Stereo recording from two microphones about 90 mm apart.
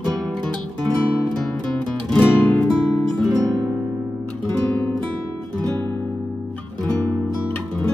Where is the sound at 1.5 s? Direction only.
10° left (ahead or behind).